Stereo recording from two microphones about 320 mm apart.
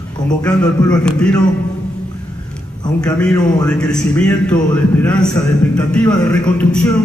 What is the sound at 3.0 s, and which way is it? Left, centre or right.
A man's voice, centre.